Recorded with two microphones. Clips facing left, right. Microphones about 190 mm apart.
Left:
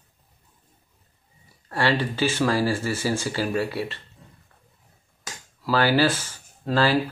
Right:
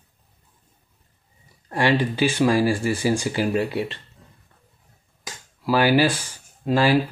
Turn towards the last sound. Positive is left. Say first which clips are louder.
# right 2 dB
turn(degrees=-15)  # may be behind; listen again after turning